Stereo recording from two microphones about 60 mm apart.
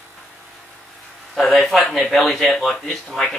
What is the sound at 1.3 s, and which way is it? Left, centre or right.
A man's voice, centre.